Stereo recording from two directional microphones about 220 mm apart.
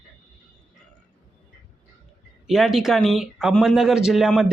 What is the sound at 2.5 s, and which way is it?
Speech, centre (ahead or behind).